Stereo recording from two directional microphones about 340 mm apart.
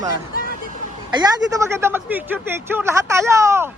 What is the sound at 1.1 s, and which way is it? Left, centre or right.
Speech, centre.